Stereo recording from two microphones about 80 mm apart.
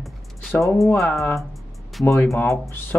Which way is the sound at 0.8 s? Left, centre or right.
Left.